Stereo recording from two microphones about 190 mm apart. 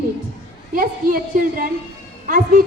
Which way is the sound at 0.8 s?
50° right (ahead or behind).